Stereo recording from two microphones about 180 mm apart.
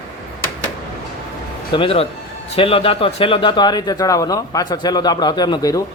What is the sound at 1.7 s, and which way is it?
A man's voice, 30° left (ahead or behind).